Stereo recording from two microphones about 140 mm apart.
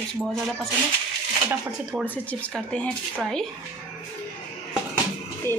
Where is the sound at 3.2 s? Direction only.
5° left (ahead or behind).